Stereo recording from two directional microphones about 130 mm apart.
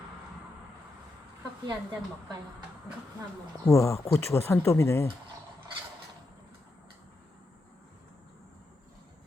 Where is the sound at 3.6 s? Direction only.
20° left (ahead or behind).